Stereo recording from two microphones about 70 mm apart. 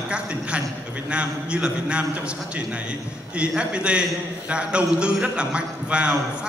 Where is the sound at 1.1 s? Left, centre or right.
Centre.